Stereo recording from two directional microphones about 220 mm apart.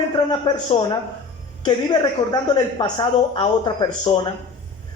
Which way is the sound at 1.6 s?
20° left (ahead or behind).